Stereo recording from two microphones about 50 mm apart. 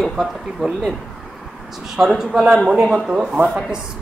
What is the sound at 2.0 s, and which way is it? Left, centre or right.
Speech, centre.